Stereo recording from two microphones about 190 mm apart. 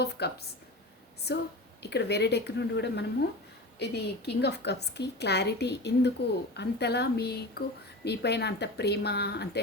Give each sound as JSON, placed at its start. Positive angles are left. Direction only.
{"t": 0.0, "sound": "a woman's voice", "side_deg": 60}
{"t": 1.3, "sound": "a woman's voice", "side_deg": 60}